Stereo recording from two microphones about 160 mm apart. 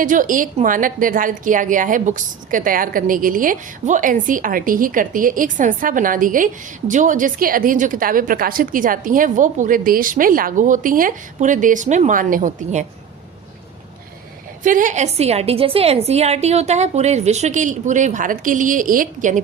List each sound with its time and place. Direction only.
0.0 s a woman's voice: 55° right (ahead or behind)
14.6 s a woman's voice: 55° right (ahead or behind)